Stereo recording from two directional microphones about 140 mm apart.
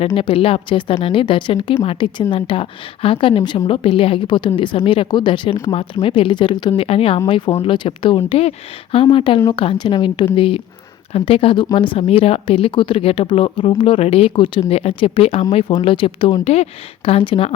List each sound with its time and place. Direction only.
0.0 s speech: 40° left (ahead or behind)